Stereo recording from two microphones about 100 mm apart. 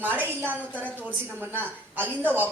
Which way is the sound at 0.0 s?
20° right (ahead or behind).